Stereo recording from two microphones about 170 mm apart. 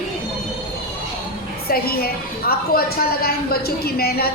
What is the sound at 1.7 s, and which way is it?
A woman's voice, 65° left (ahead or behind).